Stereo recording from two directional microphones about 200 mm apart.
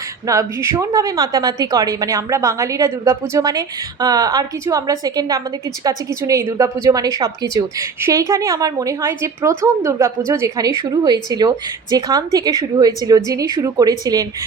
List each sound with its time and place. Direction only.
0.3 s a woman's voice: 15° right (ahead or behind)